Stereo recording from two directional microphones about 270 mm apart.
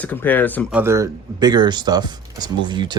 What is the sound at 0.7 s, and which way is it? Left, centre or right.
A man's voice, centre.